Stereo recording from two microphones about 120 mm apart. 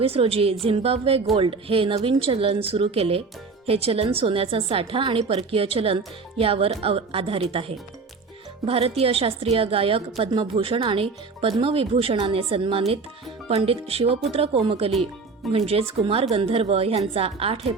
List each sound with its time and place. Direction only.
0.0 s a woman's voice: 55° right (ahead or behind)